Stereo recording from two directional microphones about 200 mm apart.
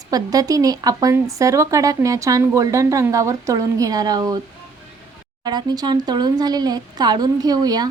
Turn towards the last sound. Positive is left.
turn(degrees=-20)  # may be behind; listen again after turning